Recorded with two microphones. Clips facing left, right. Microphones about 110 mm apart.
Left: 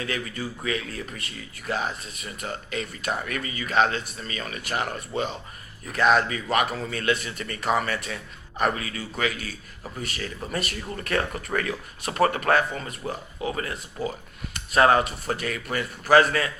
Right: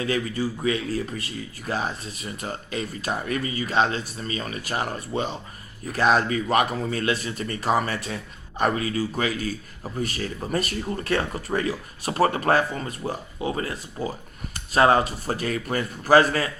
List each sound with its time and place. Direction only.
0.0 s speech: 30° right (ahead or behind)
10.9 s speech: 30° right (ahead or behind)